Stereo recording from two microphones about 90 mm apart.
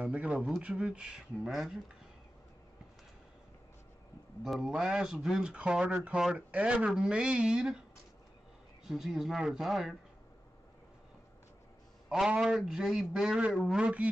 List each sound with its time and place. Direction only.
0.0 s speech: 10° right (ahead or behind)
4.4 s speech: 5° right (ahead or behind)
8.8 s a man's voice: 5° right (ahead or behind)
12.1 s a man's voice: 5° right (ahead or behind)